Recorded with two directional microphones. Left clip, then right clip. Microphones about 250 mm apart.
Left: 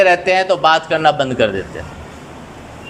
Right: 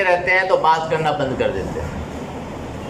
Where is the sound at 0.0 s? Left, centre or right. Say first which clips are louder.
Left 4 dB; left.